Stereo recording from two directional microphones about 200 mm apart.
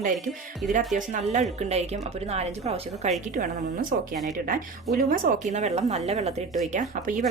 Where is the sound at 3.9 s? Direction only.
45° right (ahead or behind).